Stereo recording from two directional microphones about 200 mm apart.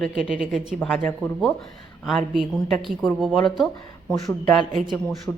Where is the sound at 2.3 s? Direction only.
Centre (ahead or behind).